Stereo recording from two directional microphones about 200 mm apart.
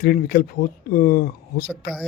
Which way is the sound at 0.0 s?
50° left (ahead or behind).